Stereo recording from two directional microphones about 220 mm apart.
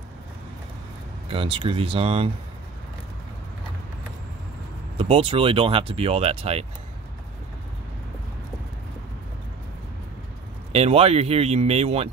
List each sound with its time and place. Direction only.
1.3 s speech: 25° right (ahead or behind)
4.9 s speech: 25° right (ahead or behind)
10.7 s speech: 25° right (ahead or behind)